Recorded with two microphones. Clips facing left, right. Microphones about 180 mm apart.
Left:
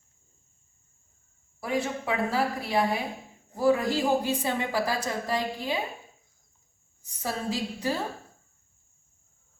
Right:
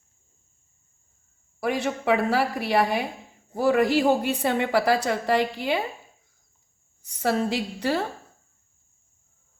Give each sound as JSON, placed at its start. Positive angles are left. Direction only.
{"t": 1.6, "sound": "a woman's voice", "side_deg": -75}
{"t": 7.0, "sound": "a woman's voice", "side_deg": -70}